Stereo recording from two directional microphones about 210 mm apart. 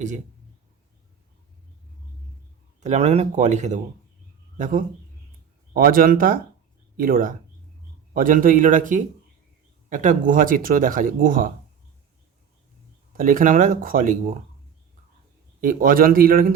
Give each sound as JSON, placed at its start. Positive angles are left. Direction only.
{"t": 2.8, "sound": "a man's voice", "side_deg": -35}
{"t": 13.1, "sound": "speech", "side_deg": -40}
{"t": 15.6, "sound": "a man's voice", "side_deg": -40}